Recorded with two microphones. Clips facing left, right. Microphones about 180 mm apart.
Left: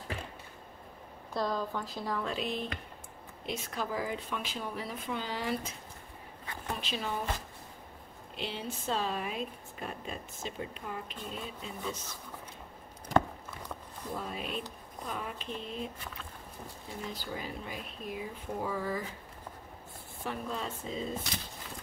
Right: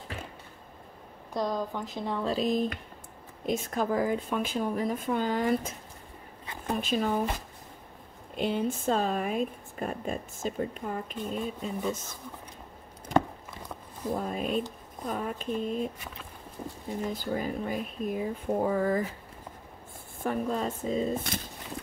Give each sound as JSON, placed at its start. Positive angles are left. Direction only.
{"t": 1.3, "sound": "speech", "side_deg": -15}
{"t": 8.4, "sound": "speech", "side_deg": -50}
{"t": 14.1, "sound": "speech", "side_deg": -45}
{"t": 17.1, "sound": "speech", "side_deg": -50}
{"t": 20.2, "sound": "speech", "side_deg": -45}